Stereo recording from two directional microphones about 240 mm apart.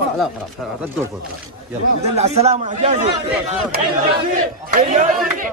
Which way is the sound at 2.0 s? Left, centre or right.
Right.